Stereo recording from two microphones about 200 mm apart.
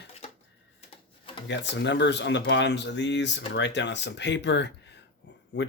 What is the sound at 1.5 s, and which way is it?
Speech, 60° left (ahead or behind).